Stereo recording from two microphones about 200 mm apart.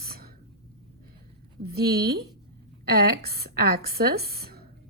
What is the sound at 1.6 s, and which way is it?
Speech, 50° right (ahead or behind).